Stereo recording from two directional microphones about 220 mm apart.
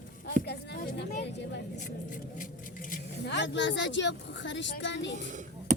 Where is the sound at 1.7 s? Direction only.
35° left (ahead or behind).